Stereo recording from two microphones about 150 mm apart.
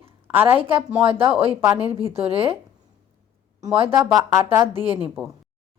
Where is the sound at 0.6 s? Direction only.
40° right (ahead or behind).